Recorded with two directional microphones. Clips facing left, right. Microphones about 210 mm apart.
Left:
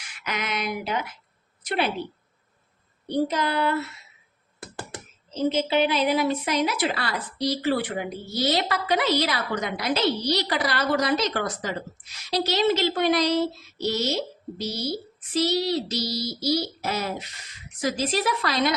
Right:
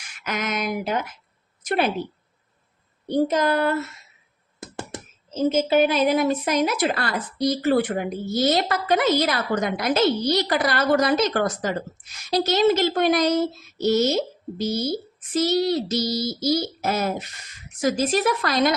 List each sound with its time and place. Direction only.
0.1 s a woman's voice: 45° right (ahead or behind)
3.1 s a woman's voice: 45° right (ahead or behind)
5.3 s a woman's voice: 45° right (ahead or behind)